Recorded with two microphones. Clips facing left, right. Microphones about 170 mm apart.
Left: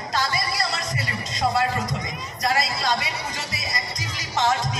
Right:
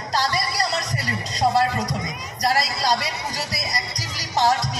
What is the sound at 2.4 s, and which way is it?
Speech, 35° right (ahead or behind).